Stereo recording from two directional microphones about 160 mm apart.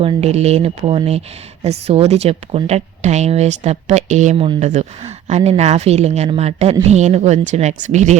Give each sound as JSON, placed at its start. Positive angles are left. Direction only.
{"t": 0.0, "sound": "a woman's voice", "side_deg": -40}